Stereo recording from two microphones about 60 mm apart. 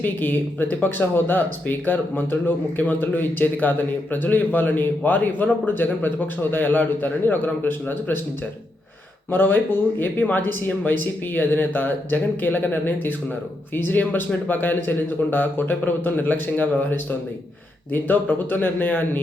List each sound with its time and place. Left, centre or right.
0.0 s speech: left
9.3 s speech: left